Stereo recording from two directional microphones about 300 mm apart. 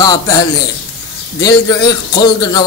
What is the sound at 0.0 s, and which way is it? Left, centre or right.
Speech, centre.